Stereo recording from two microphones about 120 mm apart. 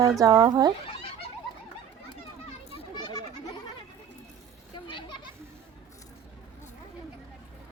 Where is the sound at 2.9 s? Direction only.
35° left (ahead or behind).